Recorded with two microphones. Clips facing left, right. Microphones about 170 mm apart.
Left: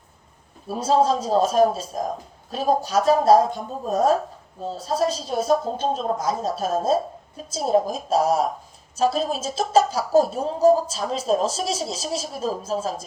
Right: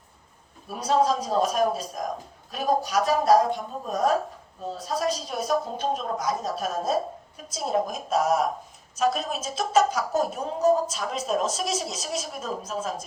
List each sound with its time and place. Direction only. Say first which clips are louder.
0.7 s a woman's voice: left 3 dB; 30° left (ahead or behind)